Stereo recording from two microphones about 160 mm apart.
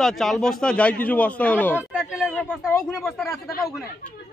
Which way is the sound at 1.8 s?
5° right (ahead or behind).